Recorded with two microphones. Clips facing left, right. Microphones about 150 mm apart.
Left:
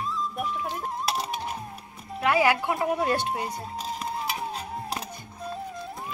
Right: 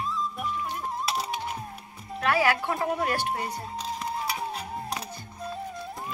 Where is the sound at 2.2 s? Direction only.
20° left (ahead or behind).